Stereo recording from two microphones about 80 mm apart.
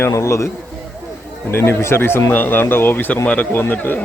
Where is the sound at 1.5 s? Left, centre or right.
Left.